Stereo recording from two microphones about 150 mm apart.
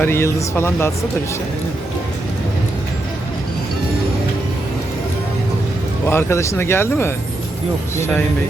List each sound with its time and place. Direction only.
0.0 s speech: 15° left (ahead or behind)
6.1 s speech: 15° left (ahead or behind)